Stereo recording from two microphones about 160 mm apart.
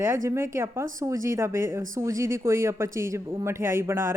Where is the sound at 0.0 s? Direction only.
20° right (ahead or behind).